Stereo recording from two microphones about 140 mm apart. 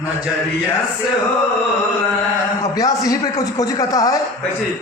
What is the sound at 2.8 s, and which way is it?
A man's voice, 25° left (ahead or behind).